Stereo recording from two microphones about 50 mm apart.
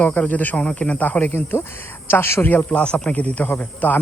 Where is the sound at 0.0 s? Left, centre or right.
Left.